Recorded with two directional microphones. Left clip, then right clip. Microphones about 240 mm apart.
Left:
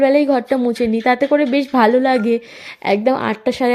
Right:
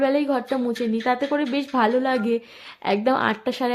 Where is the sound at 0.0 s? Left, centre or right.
Centre.